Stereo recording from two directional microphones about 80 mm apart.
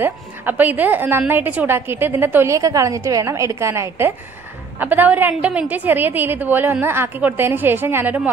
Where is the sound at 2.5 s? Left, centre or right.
Right.